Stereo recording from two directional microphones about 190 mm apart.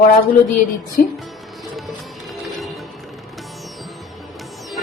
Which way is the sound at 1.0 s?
50° left (ahead or behind).